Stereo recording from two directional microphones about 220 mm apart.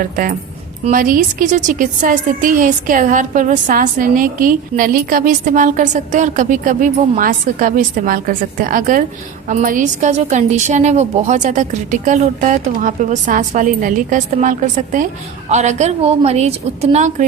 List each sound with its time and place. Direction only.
0.0 s a woman's voice: 40° right (ahead or behind)